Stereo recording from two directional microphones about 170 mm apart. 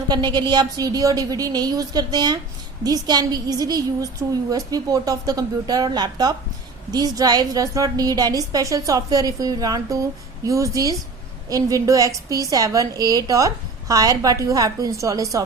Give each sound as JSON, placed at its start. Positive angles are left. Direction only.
{"t": 0.1, "sound": "a woman's voice", "side_deg": -25}